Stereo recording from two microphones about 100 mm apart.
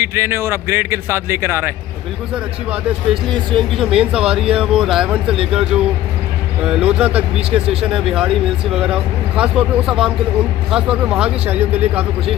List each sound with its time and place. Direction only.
0.0 s a man's voice: 25° right (ahead or behind)
3.3 s speech: 5° left (ahead or behind); by 12.1 s 15° right (ahead or behind)